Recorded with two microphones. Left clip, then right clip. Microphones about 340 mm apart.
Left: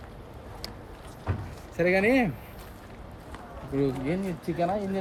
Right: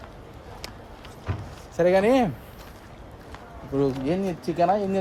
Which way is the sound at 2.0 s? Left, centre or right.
Right.